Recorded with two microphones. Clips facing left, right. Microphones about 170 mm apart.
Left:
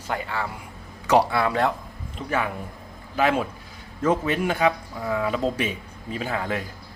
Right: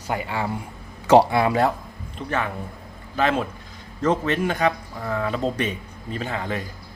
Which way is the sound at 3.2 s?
10° left (ahead or behind).